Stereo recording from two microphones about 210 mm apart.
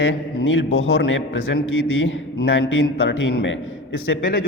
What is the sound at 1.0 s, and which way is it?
A man's voice, 65° left (ahead or behind).